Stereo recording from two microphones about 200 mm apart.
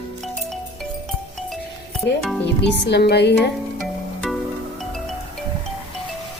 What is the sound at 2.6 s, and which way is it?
Speech, 55° left (ahead or behind).